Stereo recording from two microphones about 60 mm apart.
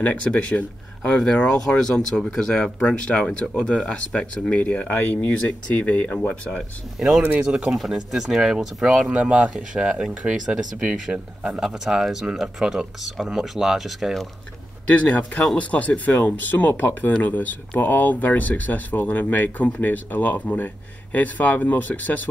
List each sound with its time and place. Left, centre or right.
0.0 s speech: left
7.0 s speech: centre
7.7 s speech: centre
9.2 s speech: right; by 14.2 s centre
15.0 s speech: centre